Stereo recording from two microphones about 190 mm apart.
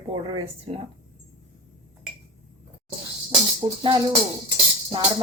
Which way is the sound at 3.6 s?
25° right (ahead or behind).